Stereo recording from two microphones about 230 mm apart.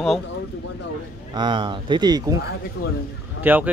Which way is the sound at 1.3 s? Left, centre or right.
Centre.